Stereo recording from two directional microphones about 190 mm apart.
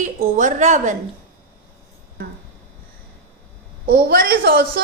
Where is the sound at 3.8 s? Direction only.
55° right (ahead or behind).